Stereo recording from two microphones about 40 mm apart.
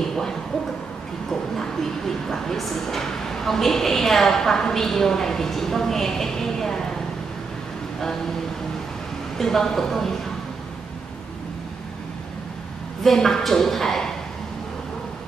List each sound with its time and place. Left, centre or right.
0.1 s a sound: centre
1.3 s speech: centre
9.4 s speech: centre
13.0 s speech: centre